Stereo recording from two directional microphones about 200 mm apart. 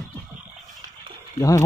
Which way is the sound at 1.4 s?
15° left (ahead or behind).